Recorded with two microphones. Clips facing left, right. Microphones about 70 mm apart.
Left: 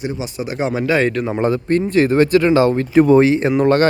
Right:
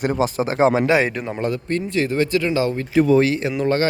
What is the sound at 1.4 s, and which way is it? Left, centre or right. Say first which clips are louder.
Speech: left 6 dB; left.